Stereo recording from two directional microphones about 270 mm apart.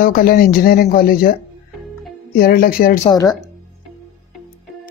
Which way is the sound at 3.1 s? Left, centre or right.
Centre.